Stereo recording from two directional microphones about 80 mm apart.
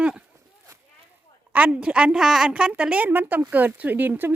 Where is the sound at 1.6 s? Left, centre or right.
Centre.